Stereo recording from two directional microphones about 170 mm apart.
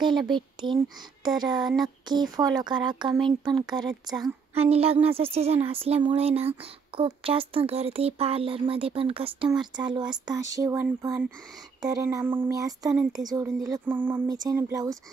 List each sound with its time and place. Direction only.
0.0 s speech: 25° right (ahead or behind)
4.6 s speech: 35° right (ahead or behind); by 12.9 s 20° right (ahead or behind)
13.4 s a sound: 10° right (ahead or behind)
14.2 s speech: 20° right (ahead or behind)